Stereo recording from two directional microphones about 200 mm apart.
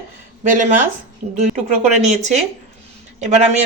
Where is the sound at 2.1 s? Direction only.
35° right (ahead or behind).